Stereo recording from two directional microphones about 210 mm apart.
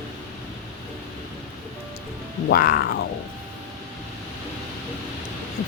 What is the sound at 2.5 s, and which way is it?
Speech, 45° left (ahead or behind).